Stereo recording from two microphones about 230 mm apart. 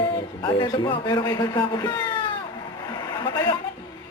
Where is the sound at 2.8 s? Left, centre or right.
Centre.